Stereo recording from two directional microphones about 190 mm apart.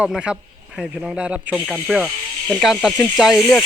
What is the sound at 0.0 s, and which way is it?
Speech, 5° right (ahead or behind).